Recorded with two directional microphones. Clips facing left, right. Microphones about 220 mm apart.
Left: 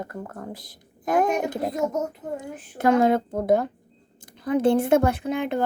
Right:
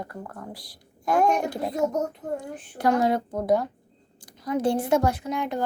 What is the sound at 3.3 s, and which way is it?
Speech, 50° left (ahead or behind).